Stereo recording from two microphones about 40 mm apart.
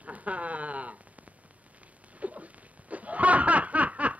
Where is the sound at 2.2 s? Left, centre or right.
Right.